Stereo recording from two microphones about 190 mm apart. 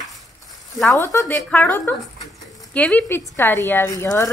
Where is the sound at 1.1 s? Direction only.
10° left (ahead or behind).